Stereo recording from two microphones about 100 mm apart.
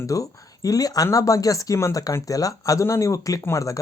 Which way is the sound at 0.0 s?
35° left (ahead or behind).